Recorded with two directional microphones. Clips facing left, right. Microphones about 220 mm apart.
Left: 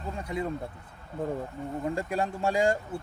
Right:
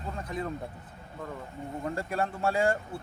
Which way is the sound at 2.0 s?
15° left (ahead or behind).